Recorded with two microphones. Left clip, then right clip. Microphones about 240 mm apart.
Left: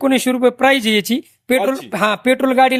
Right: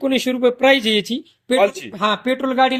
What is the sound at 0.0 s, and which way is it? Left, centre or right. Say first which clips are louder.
Speech: left 3 dB; left.